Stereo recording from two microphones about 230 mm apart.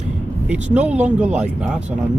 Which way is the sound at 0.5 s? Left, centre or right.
Centre.